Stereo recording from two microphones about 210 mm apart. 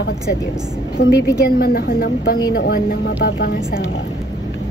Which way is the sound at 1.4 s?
45° left (ahead or behind).